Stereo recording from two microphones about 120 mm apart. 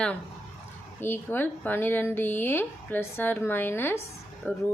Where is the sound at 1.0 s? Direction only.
20° left (ahead or behind).